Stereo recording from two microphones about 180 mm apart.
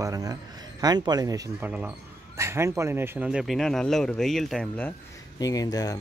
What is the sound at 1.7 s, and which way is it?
Speech, 10° right (ahead or behind).